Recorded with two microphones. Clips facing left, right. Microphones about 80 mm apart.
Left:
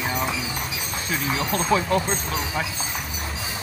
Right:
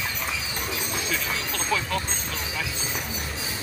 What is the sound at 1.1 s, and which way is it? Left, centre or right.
Music, left.